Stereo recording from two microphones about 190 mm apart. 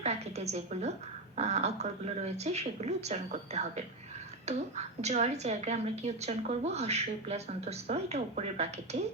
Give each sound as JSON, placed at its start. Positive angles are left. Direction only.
{"t": 0.0, "sound": "a woman's voice", "side_deg": -35}